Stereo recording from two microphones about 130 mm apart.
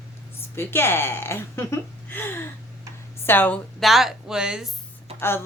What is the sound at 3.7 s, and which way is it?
Speech, centre (ahead or behind).